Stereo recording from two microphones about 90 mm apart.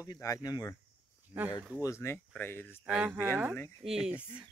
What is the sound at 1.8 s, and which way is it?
Speech, 30° left (ahead or behind).